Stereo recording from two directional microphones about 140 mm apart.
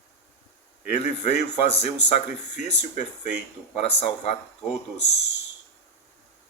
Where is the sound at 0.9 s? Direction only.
50° left (ahead or behind).